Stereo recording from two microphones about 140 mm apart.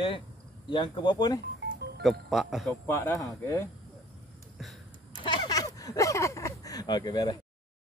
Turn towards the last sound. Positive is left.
turn(degrees=30)  # may be behind; listen again after turning